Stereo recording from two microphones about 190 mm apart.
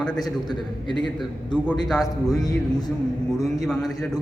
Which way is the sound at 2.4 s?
20° left (ahead or behind).